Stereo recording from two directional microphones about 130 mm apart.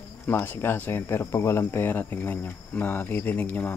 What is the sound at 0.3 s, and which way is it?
Speech, 15° left (ahead or behind).